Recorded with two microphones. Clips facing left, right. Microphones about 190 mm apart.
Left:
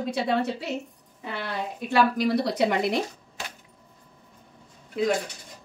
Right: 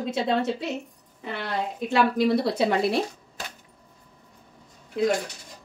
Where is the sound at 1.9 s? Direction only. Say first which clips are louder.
Right 1 dB; 25° right (ahead or behind).